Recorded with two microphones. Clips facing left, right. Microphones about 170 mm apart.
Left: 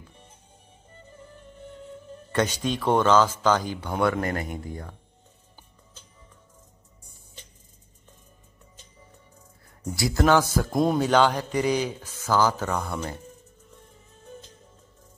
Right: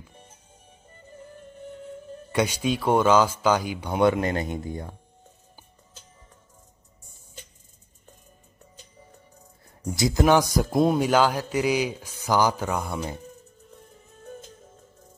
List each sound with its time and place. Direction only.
2.3 s speech: 10° right (ahead or behind)
9.8 s speech: 20° right (ahead or behind)
10.7 s speech: 5° right (ahead or behind)